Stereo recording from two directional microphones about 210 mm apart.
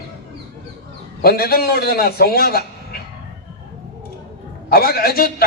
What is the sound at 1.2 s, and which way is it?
A man's voice, 45° left (ahead or behind).